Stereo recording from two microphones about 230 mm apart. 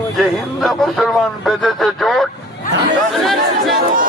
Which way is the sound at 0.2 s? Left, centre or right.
Centre.